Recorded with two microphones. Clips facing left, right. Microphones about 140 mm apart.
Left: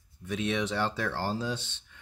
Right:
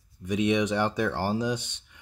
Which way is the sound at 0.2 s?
15° right (ahead or behind).